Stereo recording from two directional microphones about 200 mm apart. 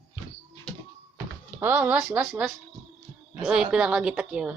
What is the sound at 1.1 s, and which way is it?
A woman's voice, 10° right (ahead or behind).